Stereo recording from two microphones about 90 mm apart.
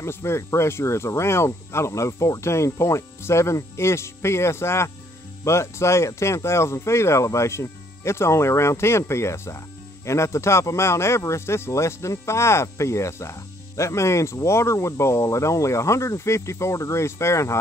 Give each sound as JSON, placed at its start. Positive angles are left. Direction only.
{"t": 0.0, "sound": "speech", "side_deg": 30}